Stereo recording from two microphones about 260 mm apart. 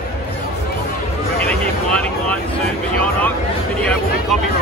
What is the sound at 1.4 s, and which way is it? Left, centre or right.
Vehicle, centre.